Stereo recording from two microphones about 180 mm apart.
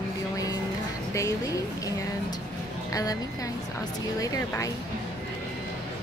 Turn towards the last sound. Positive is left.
turn(degrees=20)  # may be behind; listen again after turning